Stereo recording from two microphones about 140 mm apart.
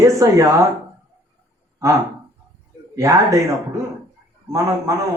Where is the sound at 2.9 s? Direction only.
25° right (ahead or behind).